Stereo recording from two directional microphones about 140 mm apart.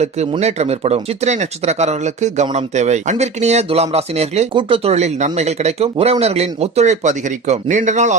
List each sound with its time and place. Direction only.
0.3 s speech: 50° right (ahead or behind)